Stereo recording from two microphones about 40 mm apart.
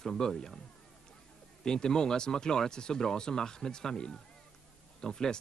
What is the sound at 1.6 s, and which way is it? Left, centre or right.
Speech, centre.